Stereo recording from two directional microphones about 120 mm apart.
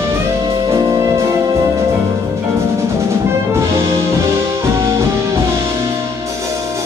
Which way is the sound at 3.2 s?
20° right (ahead or behind).